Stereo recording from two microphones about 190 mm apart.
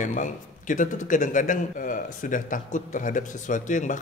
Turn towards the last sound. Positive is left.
turn(degrees=40)  # may be behind; listen again after turning